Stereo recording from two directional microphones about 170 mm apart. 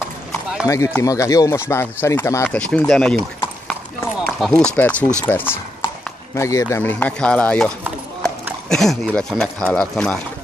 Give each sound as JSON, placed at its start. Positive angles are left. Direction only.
{"t": 0.7, "sound": "speech", "side_deg": 15}
{"t": 4.3, "sound": "run", "side_deg": 0}
{"t": 4.6, "sound": "speech", "side_deg": 10}